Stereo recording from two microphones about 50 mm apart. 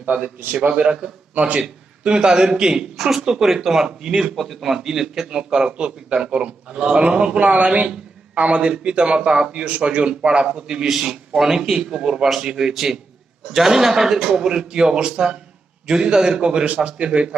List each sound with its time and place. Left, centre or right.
0.7 s speech: centre